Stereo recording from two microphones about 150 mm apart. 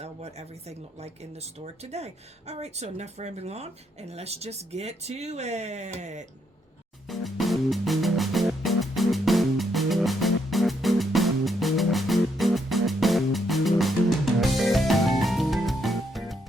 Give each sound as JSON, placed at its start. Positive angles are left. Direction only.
{"t": 0.0, "sound": "speech", "side_deg": -45}
{"t": 7.1, "sound": "music", "side_deg": 0}